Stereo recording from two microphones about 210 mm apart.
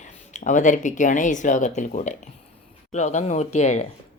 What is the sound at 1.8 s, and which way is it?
Mantra, 35° left (ahead or behind).